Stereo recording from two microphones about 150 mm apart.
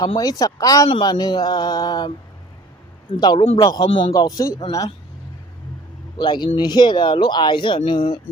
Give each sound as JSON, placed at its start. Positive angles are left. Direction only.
{"t": 0.2, "sound": "speech", "side_deg": 25}
{"t": 6.1, "sound": "speech", "side_deg": 30}